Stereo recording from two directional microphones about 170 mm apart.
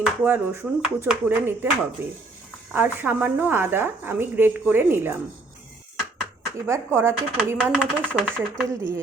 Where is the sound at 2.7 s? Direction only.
10° right (ahead or behind).